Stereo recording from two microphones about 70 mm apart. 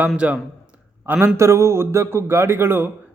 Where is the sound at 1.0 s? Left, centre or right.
Right.